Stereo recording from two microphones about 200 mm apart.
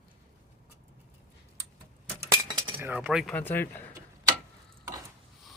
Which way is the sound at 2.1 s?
20° right (ahead or behind).